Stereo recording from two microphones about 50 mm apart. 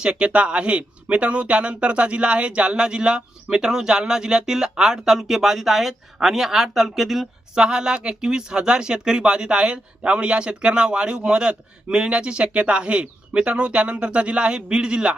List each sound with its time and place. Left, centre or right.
0.0 s speech: centre
7.5 s speech: centre